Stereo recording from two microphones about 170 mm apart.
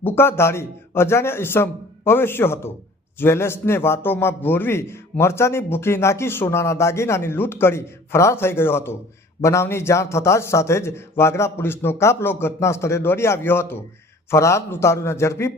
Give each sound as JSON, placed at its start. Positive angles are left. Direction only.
{"t": 0.0, "sound": "a man's voice", "side_deg": 15}